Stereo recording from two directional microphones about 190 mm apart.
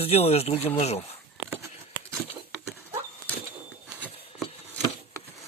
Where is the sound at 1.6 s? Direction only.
15° right (ahead or behind).